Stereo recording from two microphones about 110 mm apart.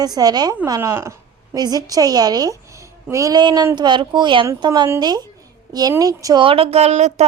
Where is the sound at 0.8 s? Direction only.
25° right (ahead or behind).